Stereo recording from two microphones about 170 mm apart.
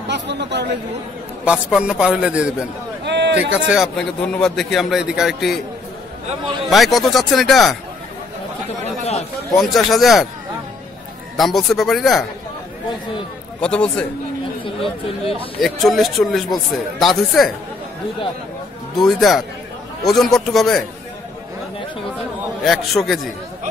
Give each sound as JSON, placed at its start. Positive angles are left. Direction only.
{"t": 0.1, "sound": "speech", "side_deg": -90}
{"t": 1.4, "sound": "speech", "side_deg": -5}
{"t": 3.1, "sound": "a sound", "side_deg": -90}
{"t": 3.5, "sound": "speech", "side_deg": -5}
{"t": 6.7, "sound": "speech", "side_deg": 0}
{"t": 8.8, "sound": "speech", "side_deg": 40}
{"t": 9.6, "sound": "speech", "side_deg": 0}
{"t": 11.3, "sound": "speech", "side_deg": 0}
{"t": 13.6, "sound": "speech", "side_deg": 5}
{"t": 15.6, "sound": "speech", "side_deg": 0}
{"t": 18.9, "sound": "speech", "side_deg": 0}
{"t": 22.7, "sound": "speech", "side_deg": 0}